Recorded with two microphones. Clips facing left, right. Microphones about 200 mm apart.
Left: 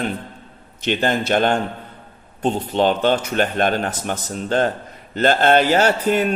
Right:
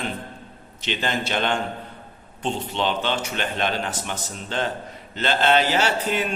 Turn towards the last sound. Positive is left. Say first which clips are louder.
# left 6 dB
turn(degrees=45)  # may be behind; listen again after turning